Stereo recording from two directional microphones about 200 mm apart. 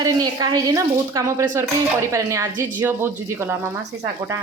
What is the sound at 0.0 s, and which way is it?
Speech, 20° right (ahead or behind).